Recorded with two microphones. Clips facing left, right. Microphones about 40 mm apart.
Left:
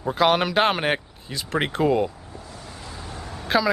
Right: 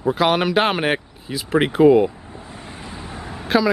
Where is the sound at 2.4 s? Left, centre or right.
Right.